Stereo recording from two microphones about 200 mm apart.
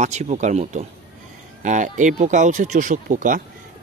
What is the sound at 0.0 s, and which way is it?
Speech, 35° right (ahead or behind).